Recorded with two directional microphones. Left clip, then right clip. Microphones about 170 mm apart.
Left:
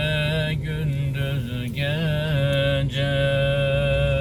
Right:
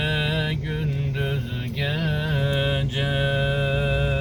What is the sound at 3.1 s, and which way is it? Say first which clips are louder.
Music: left 3 dB; 15° right (ahead or behind).